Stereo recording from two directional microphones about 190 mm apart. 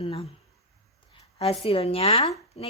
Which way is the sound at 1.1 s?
30° left (ahead or behind).